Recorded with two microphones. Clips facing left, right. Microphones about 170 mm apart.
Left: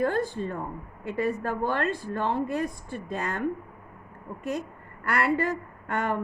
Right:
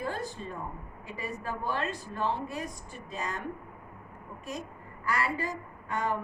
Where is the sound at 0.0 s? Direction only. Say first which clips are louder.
Left 9 dB; 55° left (ahead or behind).